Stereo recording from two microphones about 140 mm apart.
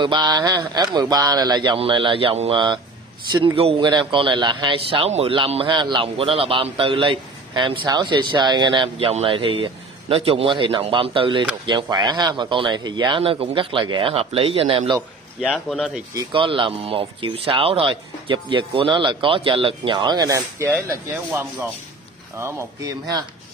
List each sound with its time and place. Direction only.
0.0 s speech: 30° right (ahead or behind)
15.4 s speech: centre (ahead or behind)
16.2 s speech: 35° right (ahead or behind)